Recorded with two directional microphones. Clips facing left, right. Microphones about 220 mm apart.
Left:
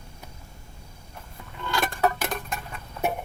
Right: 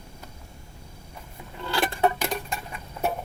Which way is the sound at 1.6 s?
30° right (ahead or behind).